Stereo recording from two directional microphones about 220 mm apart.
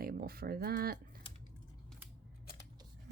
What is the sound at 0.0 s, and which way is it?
Speech, 45° right (ahead or behind).